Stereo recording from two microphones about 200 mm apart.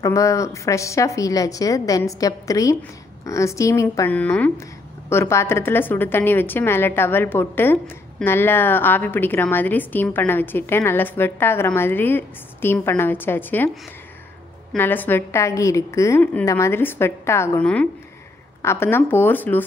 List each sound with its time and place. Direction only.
0.0 s a woman's voice: 15° left (ahead or behind)
14.7 s a woman's voice: 10° left (ahead or behind)